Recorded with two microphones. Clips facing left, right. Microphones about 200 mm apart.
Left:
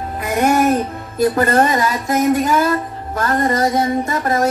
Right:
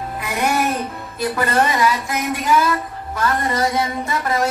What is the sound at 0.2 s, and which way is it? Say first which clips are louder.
A woman's voice: left 6 dB; 45° left (ahead or behind).